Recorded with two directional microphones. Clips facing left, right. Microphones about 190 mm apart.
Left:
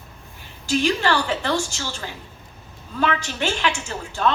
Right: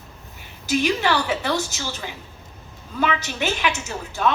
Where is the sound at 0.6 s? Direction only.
10° right (ahead or behind).